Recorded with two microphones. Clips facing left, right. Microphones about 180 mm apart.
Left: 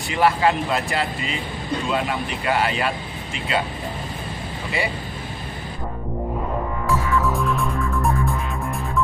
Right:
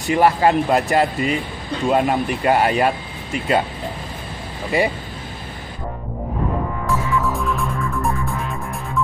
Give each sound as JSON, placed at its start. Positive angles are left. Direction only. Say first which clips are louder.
{"t": 0.1, "sound": "speech", "louder": "right 4 dB", "side_deg": -45}
{"t": 7.2, "sound": "music", "louder": "even", "side_deg": 0}